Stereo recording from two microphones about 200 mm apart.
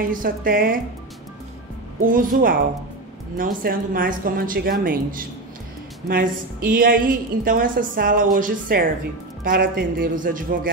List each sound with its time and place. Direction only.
0.0 s a woman's voice: 45° right (ahead or behind)
2.0 s a woman's voice: 45° right (ahead or behind)